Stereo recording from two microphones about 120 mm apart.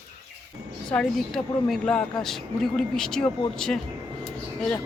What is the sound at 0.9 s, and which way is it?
Speech, 5° left (ahead or behind).